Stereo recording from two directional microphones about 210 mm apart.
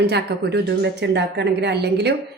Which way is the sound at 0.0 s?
50° right (ahead or behind).